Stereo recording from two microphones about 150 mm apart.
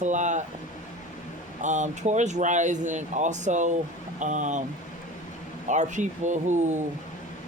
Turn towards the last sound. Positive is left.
turn(degrees=-55)  # may be behind; listen again after turning